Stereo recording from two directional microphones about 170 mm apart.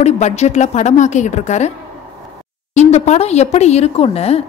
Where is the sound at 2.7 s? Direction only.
40° left (ahead or behind).